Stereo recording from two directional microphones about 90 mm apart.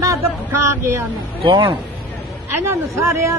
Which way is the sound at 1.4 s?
65° right (ahead or behind).